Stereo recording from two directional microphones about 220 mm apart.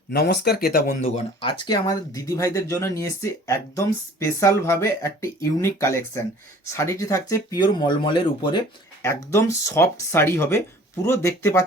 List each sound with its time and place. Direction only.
0.1 s speech: 45° left (ahead or behind)
1.0 s speech: 25° left (ahead or behind)